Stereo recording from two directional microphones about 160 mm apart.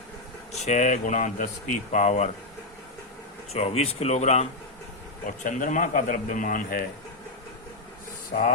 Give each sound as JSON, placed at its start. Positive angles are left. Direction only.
{"t": 0.5, "sound": "speech", "side_deg": 45}
{"t": 3.5, "sound": "a man's voice", "side_deg": 40}